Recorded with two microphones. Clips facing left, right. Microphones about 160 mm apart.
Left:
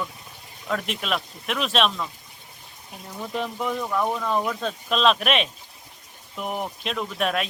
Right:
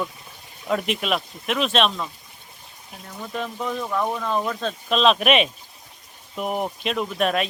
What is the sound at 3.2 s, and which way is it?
Speech, 15° left (ahead or behind).